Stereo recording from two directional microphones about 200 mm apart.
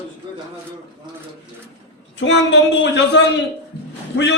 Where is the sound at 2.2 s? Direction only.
65° left (ahead or behind).